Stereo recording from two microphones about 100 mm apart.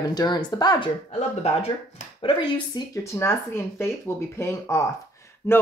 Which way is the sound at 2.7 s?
45° left (ahead or behind).